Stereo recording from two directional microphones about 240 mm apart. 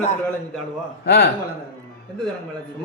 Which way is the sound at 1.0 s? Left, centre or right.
Left.